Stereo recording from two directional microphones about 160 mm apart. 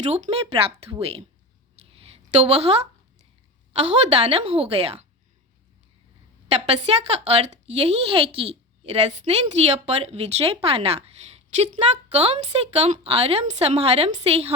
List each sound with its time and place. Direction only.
0.1 s a woman's voice: 40° right (ahead or behind)
1.8 s a sound: 40° right (ahead or behind)
3.7 s a woman's voice: 40° right (ahead or behind)
6.5 s a woman's voice: 40° right (ahead or behind)